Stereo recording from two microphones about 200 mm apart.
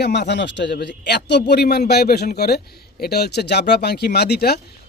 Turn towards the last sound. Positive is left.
turn(degrees=55)  # may be behind; listen again after turning